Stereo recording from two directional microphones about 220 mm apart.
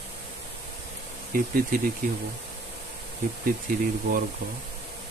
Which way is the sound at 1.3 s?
40° right (ahead or behind).